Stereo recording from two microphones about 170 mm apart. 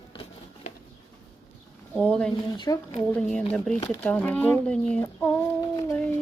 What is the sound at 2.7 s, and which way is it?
Speech, 20° left (ahead or behind).